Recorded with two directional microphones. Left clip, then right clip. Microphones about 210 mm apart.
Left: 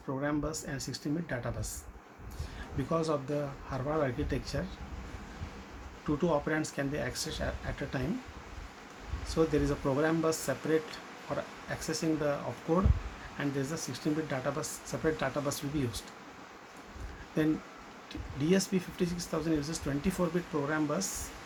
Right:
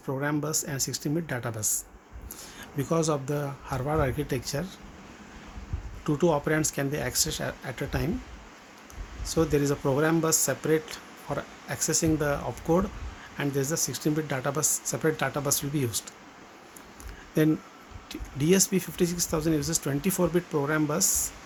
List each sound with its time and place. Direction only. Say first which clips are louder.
0.2 s speech: right 4 dB; 50° right (ahead or behind)
2.7 s speech: right 5 dB; 55° right (ahead or behind)
6.1 s speech: right 6 dB; 50° right (ahead or behind)
9.2 s speech: right 4 dB; 50° right (ahead or behind)
17.4 s speech: right 6 dB; 50° right (ahead or behind)